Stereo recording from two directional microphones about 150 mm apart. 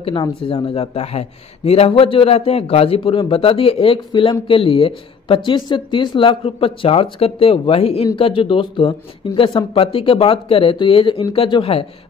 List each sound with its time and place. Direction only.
0.0 s speech: 35° left (ahead or behind)